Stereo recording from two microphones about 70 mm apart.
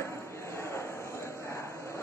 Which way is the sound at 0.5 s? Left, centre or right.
Left.